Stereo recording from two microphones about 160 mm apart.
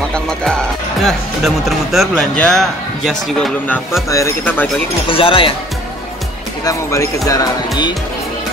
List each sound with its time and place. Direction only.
0.1 s speech: 5° left (ahead or behind)
5.1 s speech: 35° left (ahead or behind)
6.6 s speech: 20° left (ahead or behind)